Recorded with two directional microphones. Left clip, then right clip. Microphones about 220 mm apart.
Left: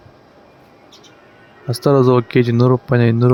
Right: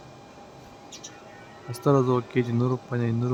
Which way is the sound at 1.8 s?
30° left (ahead or behind).